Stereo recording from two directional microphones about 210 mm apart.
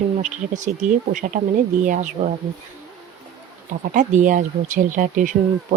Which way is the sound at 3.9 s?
40° right (ahead or behind).